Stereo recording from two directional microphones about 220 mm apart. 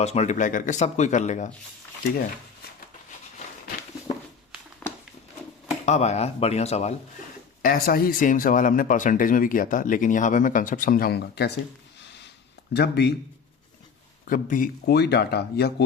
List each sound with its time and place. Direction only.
0.0 s speech: 30° left (ahead or behind)
4.8 s a sound: 5° left (ahead or behind)
5.8 s speech: 30° left (ahead or behind)
7.6 s speech: 40° left (ahead or behind)
12.7 s a man's voice: 45° left (ahead or behind)
14.3 s a man's voice: 35° left (ahead or behind)